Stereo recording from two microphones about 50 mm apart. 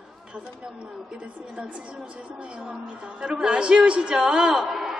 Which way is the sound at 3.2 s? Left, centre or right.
Centre.